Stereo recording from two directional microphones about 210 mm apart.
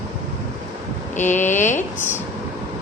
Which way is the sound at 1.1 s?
35° left (ahead or behind).